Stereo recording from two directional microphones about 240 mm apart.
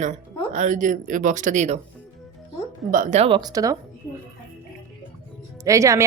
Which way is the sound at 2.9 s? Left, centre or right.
Right.